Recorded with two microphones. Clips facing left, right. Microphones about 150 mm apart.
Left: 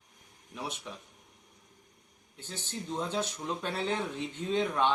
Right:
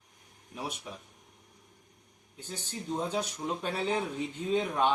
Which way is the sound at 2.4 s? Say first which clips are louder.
Even; 10° right (ahead or behind).